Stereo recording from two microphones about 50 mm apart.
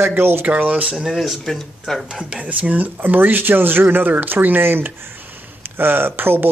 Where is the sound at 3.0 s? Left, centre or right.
Right.